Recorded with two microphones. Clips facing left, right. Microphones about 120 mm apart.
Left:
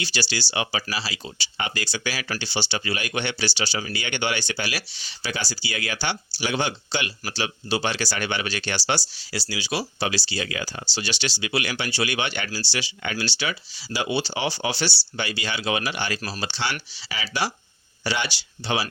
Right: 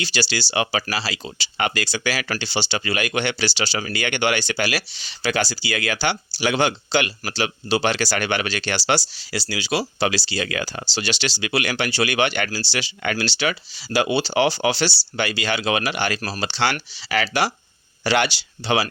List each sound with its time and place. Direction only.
0.0 s speech: 85° right
18.0 s speech: 90° right